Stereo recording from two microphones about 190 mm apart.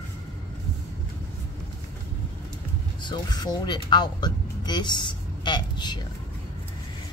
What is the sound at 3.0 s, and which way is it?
Speech, 20° left (ahead or behind).